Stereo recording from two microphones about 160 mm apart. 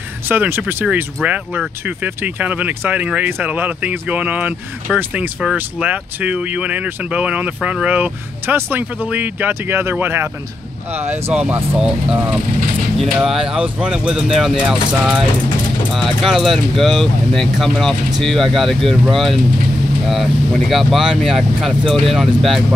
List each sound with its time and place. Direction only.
0.3 s speech: 15° right (ahead or behind)
11.0 s speech: 40° right (ahead or behind)
11.3 s speech: 10° right (ahead or behind)